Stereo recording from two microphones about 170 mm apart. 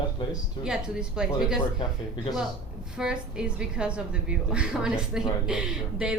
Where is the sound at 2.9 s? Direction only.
5° right (ahead or behind).